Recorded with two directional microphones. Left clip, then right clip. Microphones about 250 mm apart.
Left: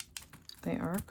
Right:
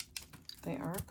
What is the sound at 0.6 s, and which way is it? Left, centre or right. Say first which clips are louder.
Speech: left 4 dB; left.